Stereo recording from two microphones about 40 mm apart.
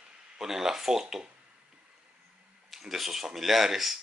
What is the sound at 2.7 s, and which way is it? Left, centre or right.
Speech, centre.